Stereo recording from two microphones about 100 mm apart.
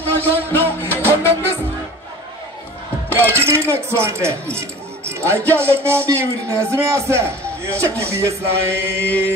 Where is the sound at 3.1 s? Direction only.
25° right (ahead or behind).